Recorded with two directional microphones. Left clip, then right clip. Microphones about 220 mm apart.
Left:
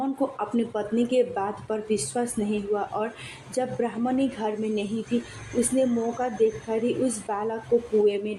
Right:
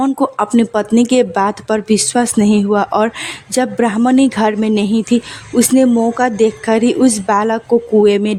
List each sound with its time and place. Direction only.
0.0 s a woman's voice: 50° right (ahead or behind)